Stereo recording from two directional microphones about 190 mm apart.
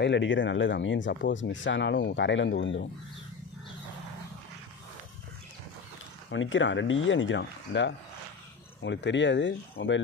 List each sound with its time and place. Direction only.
0.0 s speech: 75° left (ahead or behind)
6.3 s speech: 85° left